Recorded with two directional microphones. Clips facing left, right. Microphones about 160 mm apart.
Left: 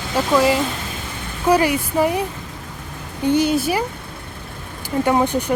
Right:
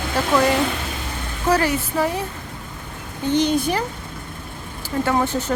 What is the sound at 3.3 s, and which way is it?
Speech, 10° left (ahead or behind).